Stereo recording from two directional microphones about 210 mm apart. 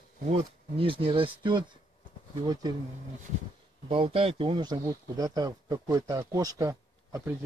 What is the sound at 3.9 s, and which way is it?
Speech, 25° right (ahead or behind).